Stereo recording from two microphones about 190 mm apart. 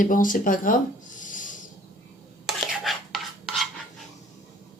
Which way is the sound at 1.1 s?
45° left (ahead or behind).